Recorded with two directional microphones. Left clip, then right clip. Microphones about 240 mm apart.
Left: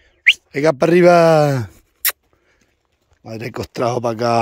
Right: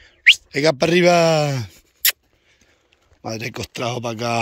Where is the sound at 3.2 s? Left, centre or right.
Centre.